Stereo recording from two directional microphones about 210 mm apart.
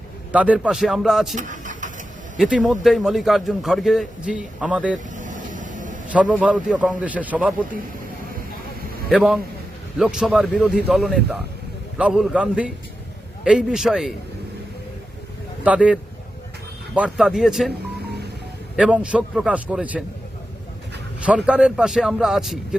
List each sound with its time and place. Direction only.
0.3 s a man's voice: 5° right (ahead or behind)
1.4 s vehicle: 35° right (ahead or behind)
2.4 s a man's voice: centre (ahead or behind)
5.1 s vehicle: 40° right (ahead or behind)
6.1 s a man's voice: 5° right (ahead or behind)
9.0 s a man's voice: centre (ahead or behind)
15.6 s a man's voice: 5° right (ahead or behind)
18.8 s a man's voice: 5° right (ahead or behind)
21.2 s a man's voice: 5° right (ahead or behind)